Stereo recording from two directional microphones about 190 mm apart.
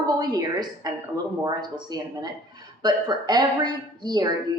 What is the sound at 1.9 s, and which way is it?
Speech, 20° right (ahead or behind).